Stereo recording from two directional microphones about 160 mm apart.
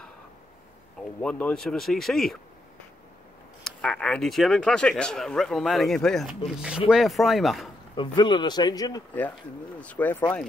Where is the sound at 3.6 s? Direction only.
5° left (ahead or behind).